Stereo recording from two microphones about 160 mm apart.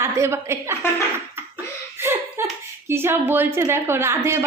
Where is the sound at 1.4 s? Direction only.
15° right (ahead or behind).